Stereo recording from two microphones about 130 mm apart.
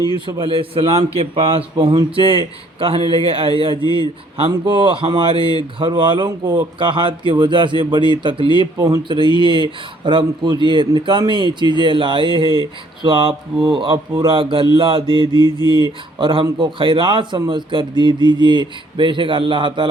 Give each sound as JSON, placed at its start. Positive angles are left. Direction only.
{"t": 0.3, "sound": "a man's voice", "side_deg": -40}